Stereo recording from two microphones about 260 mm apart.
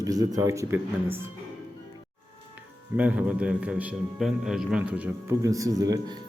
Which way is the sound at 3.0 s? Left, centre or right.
Centre.